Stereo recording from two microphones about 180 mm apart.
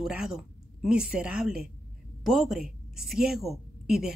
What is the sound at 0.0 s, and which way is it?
A woman's voice, 5° right (ahead or behind).